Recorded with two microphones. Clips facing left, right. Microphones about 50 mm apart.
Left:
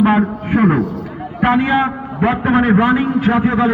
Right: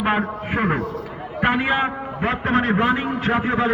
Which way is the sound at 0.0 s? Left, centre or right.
Centre.